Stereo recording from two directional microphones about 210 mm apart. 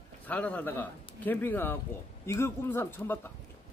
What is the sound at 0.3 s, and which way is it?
A man's voice, 5° left (ahead or behind).